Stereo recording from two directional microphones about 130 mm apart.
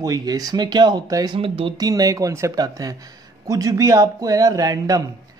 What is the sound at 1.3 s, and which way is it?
Speech, 45° right (ahead or behind).